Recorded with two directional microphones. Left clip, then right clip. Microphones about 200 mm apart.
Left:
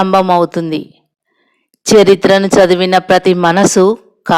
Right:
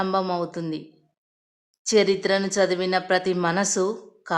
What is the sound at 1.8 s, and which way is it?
Speech, 45° left (ahead or behind).